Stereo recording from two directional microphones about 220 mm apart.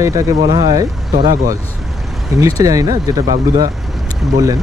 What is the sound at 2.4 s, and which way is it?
Speech, 15° right (ahead or behind).